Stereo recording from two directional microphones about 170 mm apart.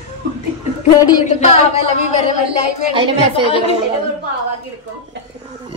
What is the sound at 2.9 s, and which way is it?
Speech, 30° right (ahead or behind).